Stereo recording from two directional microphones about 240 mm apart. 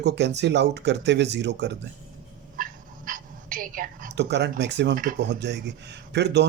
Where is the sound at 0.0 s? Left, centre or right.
Right.